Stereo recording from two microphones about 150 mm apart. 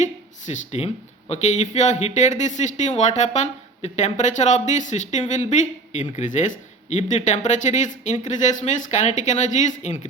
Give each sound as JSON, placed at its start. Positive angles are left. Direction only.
{"t": 0.0, "sound": "speech", "side_deg": 55}